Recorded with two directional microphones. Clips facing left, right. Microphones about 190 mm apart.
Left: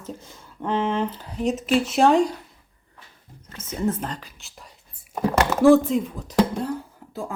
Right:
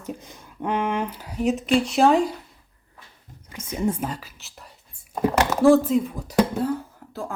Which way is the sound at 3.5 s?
15° right (ahead or behind).